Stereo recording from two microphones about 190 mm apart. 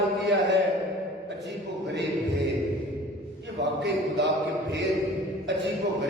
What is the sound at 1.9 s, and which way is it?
Music, 65° right (ahead or behind).